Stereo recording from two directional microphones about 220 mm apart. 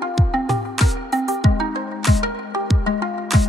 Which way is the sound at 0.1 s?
Centre (ahead or behind).